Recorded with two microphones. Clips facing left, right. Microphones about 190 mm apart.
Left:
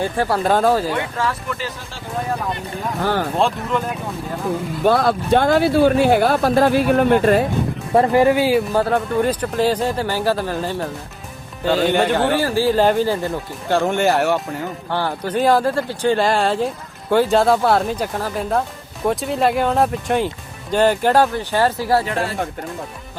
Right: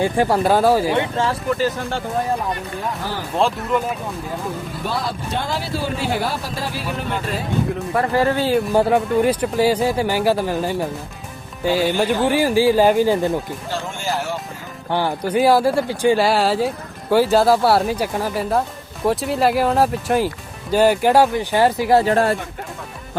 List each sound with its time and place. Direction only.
0.0 s speech: 15° right (ahead or behind)
0.9 s speech: 30° right (ahead or behind)
3.3 s speech: 5° right (ahead or behind)
4.9 s speech: 55° left (ahead or behind)
7.9 s speech: 20° left (ahead or behind)
8.7 s speech: 15° right (ahead or behind)
11.9 s speech: 65° left (ahead or behind)
12.3 s speech: 15° right (ahead or behind)
13.7 s speech: 60° left (ahead or behind)
14.8 s speech: 15° right (ahead or behind)